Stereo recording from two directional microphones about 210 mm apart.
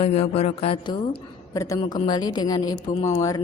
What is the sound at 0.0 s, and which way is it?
Speech, 30° left (ahead or behind).